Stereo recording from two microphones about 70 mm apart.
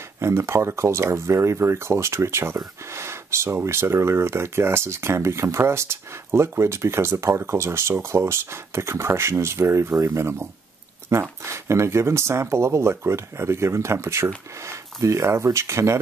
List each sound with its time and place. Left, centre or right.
0.2 s speech: right